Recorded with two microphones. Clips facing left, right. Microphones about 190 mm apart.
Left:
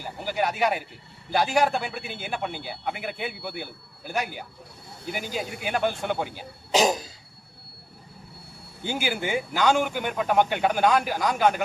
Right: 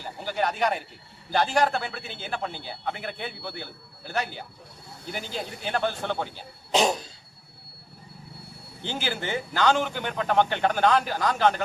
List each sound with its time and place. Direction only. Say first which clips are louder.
0.0 s a man's voice: left 1 dB; 10° left (ahead or behind)
6.7 s cough: left 1 dB; centre (ahead or behind)
8.8 s a man's voice: left 3 dB; 10° left (ahead or behind)